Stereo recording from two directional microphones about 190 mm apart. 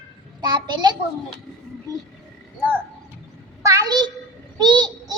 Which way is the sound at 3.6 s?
20° right (ahead or behind).